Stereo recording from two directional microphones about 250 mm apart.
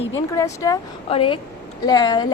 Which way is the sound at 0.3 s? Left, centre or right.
Centre.